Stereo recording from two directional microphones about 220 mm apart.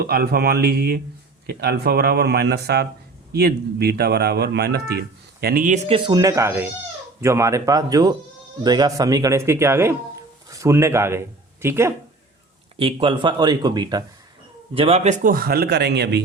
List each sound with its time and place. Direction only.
0.0 s speech: 45° right (ahead or behind)
6.1 s speech: 15° right (ahead or behind)
12.7 s speech: 25° right (ahead or behind); by 16.2 s 50° right (ahead or behind)